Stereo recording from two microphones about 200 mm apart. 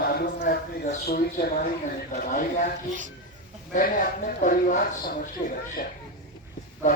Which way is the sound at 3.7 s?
45° left (ahead or behind).